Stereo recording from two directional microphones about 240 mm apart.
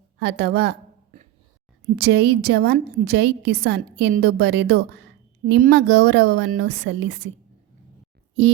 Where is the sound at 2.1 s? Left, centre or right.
Right.